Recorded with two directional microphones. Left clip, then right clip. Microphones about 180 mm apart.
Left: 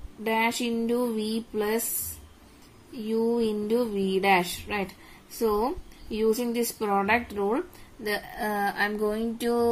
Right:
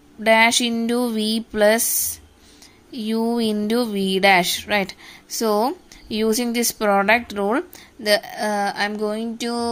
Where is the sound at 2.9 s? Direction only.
45° right (ahead or behind).